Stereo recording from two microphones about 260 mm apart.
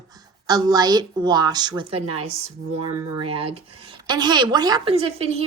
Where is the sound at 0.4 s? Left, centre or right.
Centre.